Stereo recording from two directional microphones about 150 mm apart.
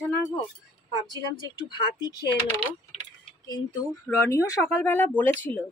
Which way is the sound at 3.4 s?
25° left (ahead or behind).